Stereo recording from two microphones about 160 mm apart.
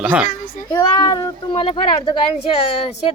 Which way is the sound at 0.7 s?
25° left (ahead or behind).